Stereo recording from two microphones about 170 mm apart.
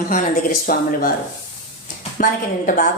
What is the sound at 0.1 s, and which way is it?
A woman's voice, 50° left (ahead or behind).